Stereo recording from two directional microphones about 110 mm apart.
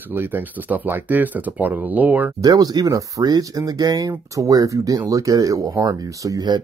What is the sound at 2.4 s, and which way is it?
Speech, 30° right (ahead or behind).